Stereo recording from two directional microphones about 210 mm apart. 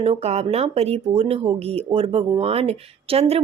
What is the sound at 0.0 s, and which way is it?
Speech, 30° right (ahead or behind).